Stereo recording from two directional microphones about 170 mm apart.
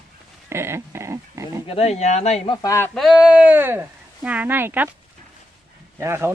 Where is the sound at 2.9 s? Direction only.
5° right (ahead or behind).